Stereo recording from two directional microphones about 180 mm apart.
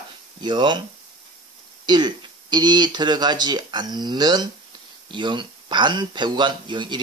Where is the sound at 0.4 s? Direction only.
25° right (ahead or behind).